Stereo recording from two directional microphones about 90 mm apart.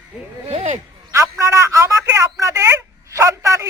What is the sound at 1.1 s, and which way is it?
Speech, 35° right (ahead or behind).